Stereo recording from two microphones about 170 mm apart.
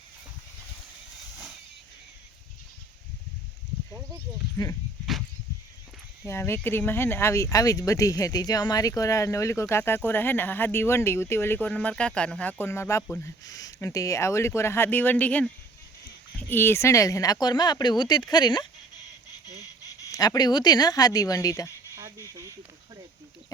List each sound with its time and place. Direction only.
6.2 s speech: 15° left (ahead or behind)
16.5 s speech: 15° left (ahead or behind)
19.8 s speech: 20° left (ahead or behind)
21.9 s a sound: 15° right (ahead or behind)